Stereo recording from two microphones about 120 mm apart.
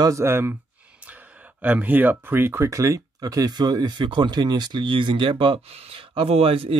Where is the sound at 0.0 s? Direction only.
25° right (ahead or behind).